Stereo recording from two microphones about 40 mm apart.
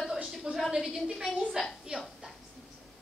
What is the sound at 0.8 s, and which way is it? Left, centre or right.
A woman's voice, centre.